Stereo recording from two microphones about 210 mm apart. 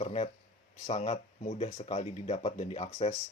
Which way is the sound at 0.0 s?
30° left (ahead or behind).